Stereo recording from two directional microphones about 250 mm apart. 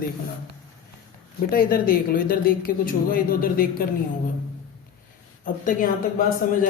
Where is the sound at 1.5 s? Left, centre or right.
Left.